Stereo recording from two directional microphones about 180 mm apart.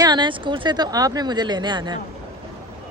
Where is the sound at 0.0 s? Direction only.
25° right (ahead or behind).